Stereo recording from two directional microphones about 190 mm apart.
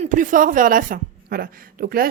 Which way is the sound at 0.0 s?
40° right (ahead or behind).